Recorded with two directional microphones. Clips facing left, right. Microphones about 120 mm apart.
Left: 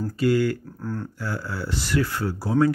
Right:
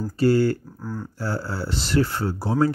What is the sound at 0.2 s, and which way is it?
Speech, 30° right (ahead or behind).